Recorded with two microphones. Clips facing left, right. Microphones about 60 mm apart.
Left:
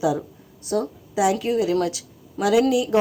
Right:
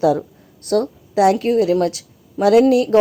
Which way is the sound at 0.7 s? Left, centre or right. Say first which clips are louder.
Right 6 dB; right.